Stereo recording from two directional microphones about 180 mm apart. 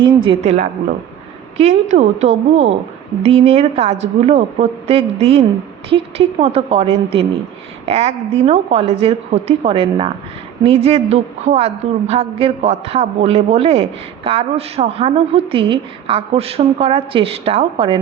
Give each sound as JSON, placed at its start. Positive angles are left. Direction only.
{"t": 0.0, "sound": "a woman's voice", "side_deg": -25}